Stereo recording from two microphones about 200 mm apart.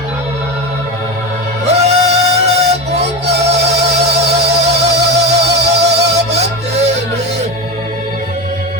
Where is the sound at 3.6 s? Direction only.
30° right (ahead or behind).